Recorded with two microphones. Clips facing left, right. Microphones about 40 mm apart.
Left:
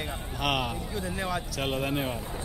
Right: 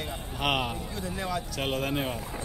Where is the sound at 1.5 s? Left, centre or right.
Centre.